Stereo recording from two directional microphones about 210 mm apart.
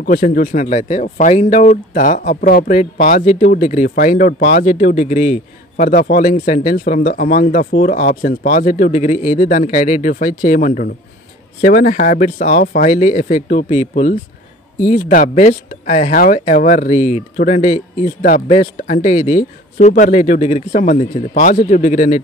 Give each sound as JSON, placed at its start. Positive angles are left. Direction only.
{"t": 0.0, "sound": "speech", "side_deg": 40}